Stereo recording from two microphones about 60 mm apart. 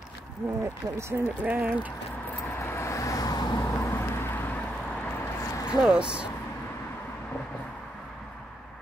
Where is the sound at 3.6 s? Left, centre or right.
Left.